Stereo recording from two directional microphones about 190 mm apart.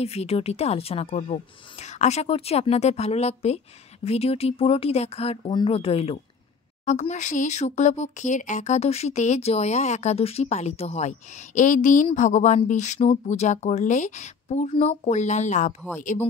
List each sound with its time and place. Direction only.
0.0 s speech: 35° left (ahead or behind)